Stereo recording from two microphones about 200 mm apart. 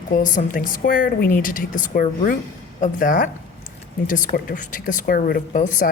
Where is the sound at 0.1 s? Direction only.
40° left (ahead or behind).